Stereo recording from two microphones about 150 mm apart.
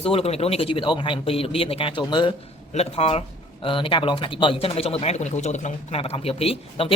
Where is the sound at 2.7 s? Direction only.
45° left (ahead or behind).